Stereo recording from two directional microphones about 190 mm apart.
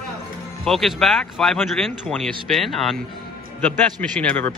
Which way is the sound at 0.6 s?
Centre (ahead or behind).